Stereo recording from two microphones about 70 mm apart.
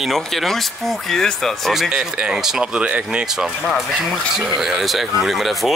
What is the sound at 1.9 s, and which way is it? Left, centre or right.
Speech, centre.